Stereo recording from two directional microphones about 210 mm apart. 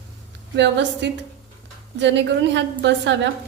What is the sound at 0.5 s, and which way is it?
A woman's voice, 55° right (ahead or behind).